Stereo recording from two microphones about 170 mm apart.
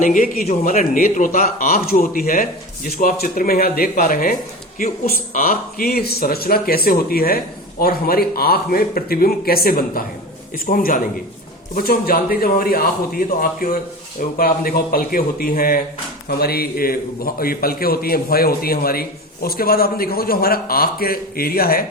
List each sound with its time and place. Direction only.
0.0 s a man's voice: 50° left (ahead or behind)